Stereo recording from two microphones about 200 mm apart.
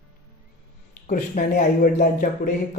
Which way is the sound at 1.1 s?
45° left (ahead or behind).